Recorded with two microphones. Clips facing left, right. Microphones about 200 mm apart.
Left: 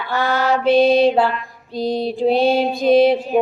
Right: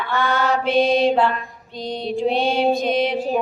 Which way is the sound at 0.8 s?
35° left (ahead or behind).